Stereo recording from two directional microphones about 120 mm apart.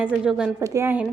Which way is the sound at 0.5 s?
25° right (ahead or behind).